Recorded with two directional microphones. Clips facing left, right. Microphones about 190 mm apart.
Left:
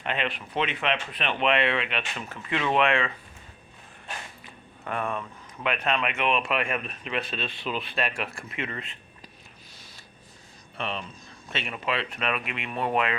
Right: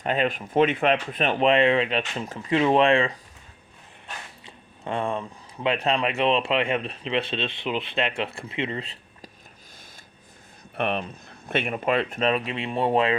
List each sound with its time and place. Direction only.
0.0 s speech: 40° right (ahead or behind)
4.8 s speech: 25° right (ahead or behind)
10.8 s speech: 60° right (ahead or behind)
12.2 s speech: 30° right (ahead or behind)